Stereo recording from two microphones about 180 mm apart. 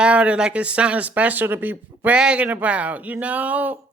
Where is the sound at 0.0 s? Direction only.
5° right (ahead or behind).